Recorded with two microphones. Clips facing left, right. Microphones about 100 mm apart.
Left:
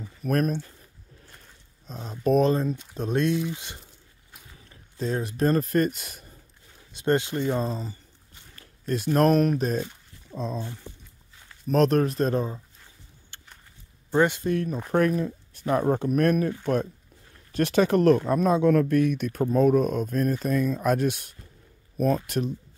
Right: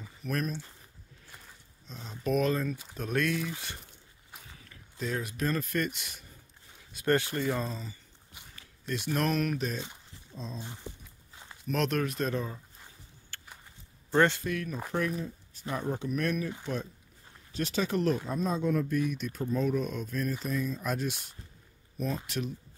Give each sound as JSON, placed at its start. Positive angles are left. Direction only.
{"t": 0.2, "sound": "speech", "side_deg": 45}
{"t": 1.9, "sound": "speech", "side_deg": 40}
{"t": 4.6, "sound": "speech", "side_deg": 30}
{"t": 6.9, "sound": "speech", "side_deg": 25}
{"t": 7.6, "sound": "speech", "side_deg": 40}
{"t": 10.3, "sound": "speech", "side_deg": 60}
{"t": 11.6, "sound": "speech", "side_deg": 40}
{"t": 13.3, "sound": "a sound", "side_deg": 20}
{"t": 14.1, "sound": "speech", "side_deg": 15}
{"t": 14.4, "sound": "speech", "side_deg": 35}
{"t": 14.9, "sound": "speech", "side_deg": 55}
{"t": 15.6, "sound": "speech", "side_deg": 50}